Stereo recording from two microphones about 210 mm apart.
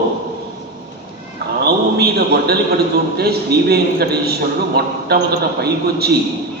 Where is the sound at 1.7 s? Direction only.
50° right (ahead or behind).